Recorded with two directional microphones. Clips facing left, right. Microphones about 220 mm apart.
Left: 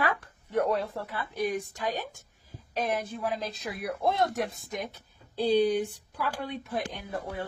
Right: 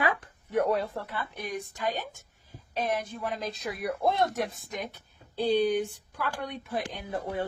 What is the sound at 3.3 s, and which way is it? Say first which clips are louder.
Speech: right 1 dB; centre (ahead or behind).